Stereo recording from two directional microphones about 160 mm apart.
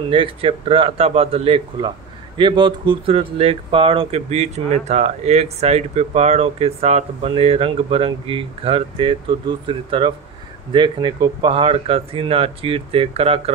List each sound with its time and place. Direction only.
0.1 s speech: 35° right (ahead or behind)